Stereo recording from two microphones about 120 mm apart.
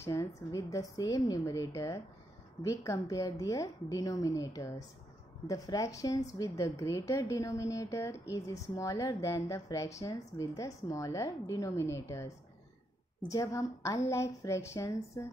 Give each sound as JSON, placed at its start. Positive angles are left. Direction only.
{"t": 0.0, "sound": "a woman's voice", "side_deg": 25}
{"t": 13.3, "sound": "a woman's voice", "side_deg": 25}